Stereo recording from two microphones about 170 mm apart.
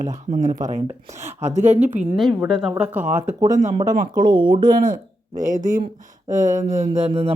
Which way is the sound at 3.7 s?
25° right (ahead or behind).